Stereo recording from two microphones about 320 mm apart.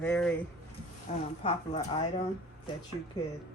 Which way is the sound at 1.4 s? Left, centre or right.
Centre.